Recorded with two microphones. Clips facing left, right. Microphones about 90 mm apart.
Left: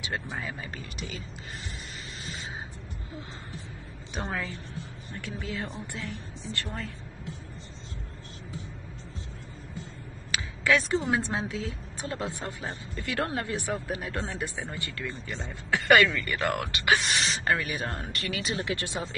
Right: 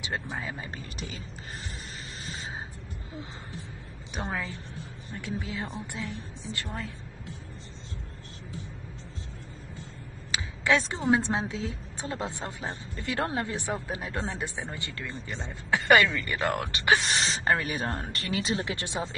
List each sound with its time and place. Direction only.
0.0 s a woman's voice: 25° right (ahead or behind)
4.2 s a woman's voice: 10° right (ahead or behind)
10.3 s a woman's voice: 25° right (ahead or behind)